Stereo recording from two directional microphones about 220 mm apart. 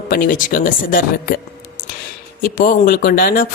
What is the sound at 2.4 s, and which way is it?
Speech, 40° left (ahead or behind).